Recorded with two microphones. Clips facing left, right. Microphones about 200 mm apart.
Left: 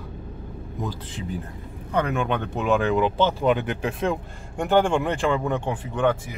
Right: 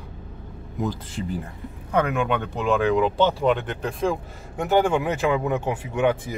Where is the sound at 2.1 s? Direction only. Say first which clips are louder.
Right 1 dB; centre (ahead or behind).